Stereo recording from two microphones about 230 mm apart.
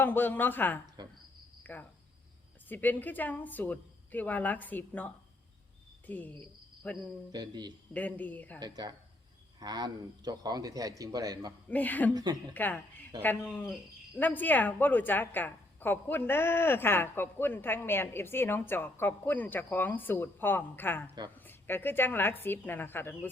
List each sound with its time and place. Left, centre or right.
0.0 s a woman's voice: centre
1.0 s cricket: centre
1.6 s a woman's voice: centre
6.1 s cricket: centre
7.3 s a man's voice: centre
7.9 s a woman's voice: centre
8.5 s a man's voice: centre
11.7 s a woman's voice: centre
12.1 s a man's voice: centre
12.5 s a woman's voice: centre